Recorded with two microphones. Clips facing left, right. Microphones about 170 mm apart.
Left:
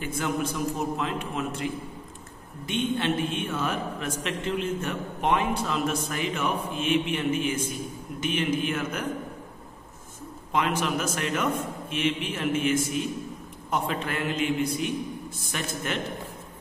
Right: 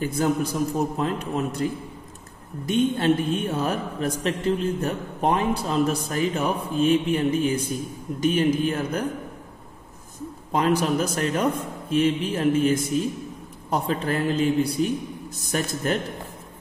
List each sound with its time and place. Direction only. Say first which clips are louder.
0.0 s a man's voice: right 5 dB; 35° right (ahead or behind)
10.5 s a man's voice: right 5 dB; 35° right (ahead or behind)